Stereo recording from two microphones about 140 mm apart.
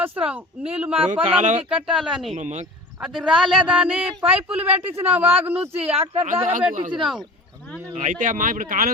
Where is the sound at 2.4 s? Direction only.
60° right (ahead or behind).